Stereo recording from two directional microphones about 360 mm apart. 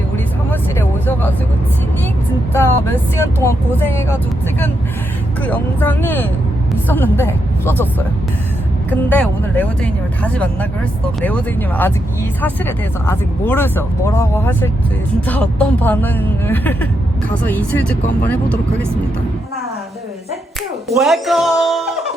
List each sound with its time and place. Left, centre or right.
0.5 s vehicle: centre
2.5 s speech: centre
5.4 s speech: centre
12.4 s speech: centre
21.0 s speech: centre